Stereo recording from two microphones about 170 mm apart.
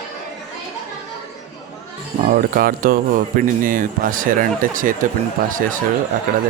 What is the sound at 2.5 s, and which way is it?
Speech, 60° right (ahead or behind).